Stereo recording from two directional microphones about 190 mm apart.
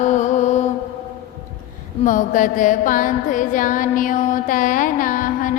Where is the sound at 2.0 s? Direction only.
45° left (ahead or behind).